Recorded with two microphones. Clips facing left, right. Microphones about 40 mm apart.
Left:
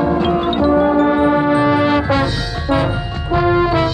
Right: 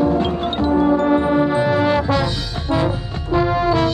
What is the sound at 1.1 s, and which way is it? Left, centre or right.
Music, left.